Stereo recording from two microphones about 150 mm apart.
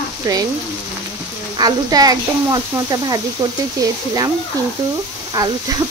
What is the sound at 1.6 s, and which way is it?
A child's voice, 25° right (ahead or behind).